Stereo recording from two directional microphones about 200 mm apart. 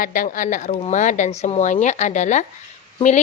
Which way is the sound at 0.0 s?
45° left (ahead or behind).